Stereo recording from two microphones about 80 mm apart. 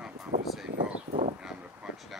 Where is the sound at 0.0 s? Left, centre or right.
Centre.